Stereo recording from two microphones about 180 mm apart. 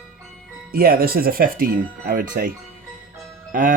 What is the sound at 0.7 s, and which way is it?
Speech, 55° right (ahead or behind).